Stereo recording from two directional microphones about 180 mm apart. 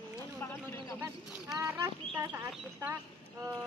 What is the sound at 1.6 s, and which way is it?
Speech, 20° right (ahead or behind).